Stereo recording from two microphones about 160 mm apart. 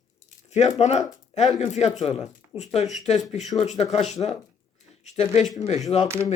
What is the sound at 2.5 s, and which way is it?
Speech, 10° right (ahead or behind).